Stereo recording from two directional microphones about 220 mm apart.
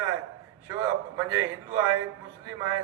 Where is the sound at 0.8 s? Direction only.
15° right (ahead or behind).